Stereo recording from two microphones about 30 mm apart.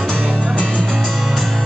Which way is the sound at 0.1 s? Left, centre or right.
Right.